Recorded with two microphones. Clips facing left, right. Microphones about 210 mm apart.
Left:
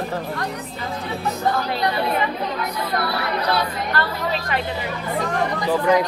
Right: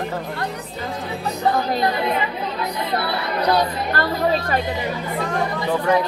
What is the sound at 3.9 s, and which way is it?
Speech, 40° right (ahead or behind).